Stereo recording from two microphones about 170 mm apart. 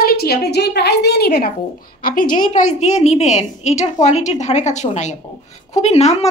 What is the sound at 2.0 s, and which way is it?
A woman's voice, 55° left (ahead or behind).